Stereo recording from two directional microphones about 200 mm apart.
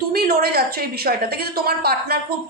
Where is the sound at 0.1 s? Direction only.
50° right (ahead or behind).